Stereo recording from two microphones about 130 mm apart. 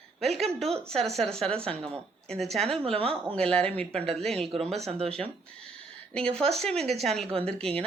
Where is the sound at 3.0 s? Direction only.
50° right (ahead or behind).